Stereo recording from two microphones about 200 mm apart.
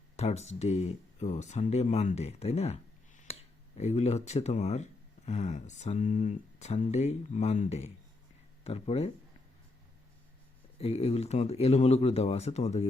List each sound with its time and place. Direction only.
0.2 s speech: 35° left (ahead or behind)
10.8 s speech: 30° left (ahead or behind)